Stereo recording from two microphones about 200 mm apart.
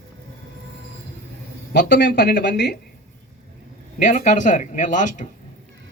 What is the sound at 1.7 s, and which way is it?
Speech, 60° left (ahead or behind).